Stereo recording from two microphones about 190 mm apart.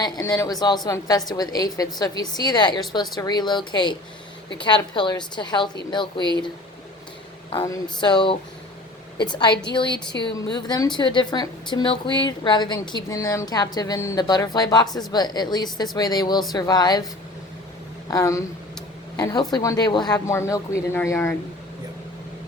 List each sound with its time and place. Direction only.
0.0 s speech: 20° left (ahead or behind)
7.5 s speech: 20° left (ahead or behind)
18.1 s a woman's voice: 15° left (ahead or behind)